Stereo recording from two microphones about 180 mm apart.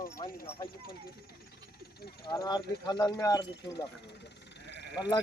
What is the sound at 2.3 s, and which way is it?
Speech, 25° left (ahead or behind).